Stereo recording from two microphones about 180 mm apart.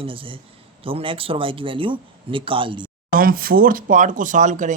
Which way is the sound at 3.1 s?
55° right (ahead or behind).